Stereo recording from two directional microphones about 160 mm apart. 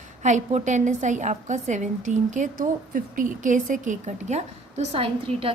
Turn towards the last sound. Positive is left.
turn(degrees=-40)  # may be behind; listen again after turning